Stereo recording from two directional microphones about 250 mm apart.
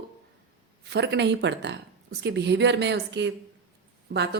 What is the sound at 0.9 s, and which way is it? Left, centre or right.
Speech, right.